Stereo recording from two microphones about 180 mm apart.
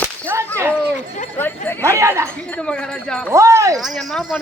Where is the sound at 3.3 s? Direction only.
15° right (ahead or behind).